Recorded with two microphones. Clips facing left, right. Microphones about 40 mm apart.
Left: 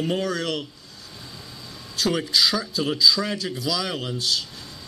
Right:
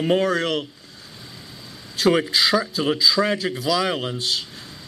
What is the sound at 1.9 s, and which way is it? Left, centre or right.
A man's voice, centre.